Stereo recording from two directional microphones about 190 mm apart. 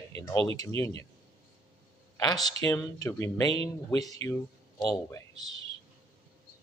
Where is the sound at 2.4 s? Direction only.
20° left (ahead or behind).